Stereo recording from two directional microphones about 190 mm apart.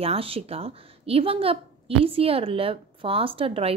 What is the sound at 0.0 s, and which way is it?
A woman's voice, 30° right (ahead or behind).